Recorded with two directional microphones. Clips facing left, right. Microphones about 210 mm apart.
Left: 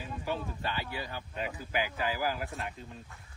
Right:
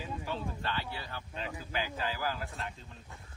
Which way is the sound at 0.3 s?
10° left (ahead or behind).